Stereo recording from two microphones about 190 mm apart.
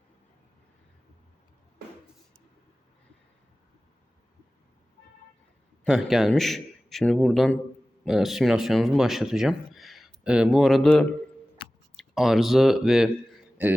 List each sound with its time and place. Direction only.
5.8 s a man's voice: centre (ahead or behind)